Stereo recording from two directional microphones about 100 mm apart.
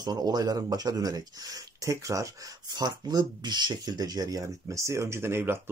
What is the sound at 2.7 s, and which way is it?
Speech, 45° right (ahead or behind).